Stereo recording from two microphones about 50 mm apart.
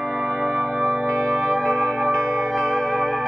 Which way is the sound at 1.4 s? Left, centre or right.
Centre.